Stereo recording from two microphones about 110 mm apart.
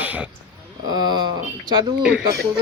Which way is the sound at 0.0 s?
15° right (ahead or behind).